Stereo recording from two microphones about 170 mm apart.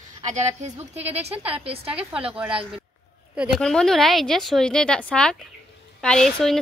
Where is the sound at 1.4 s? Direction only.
10° right (ahead or behind).